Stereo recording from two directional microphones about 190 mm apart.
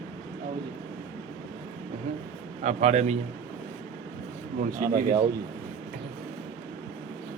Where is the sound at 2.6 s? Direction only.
40° right (ahead or behind).